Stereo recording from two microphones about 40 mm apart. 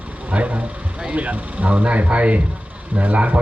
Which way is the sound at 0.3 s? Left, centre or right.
Right.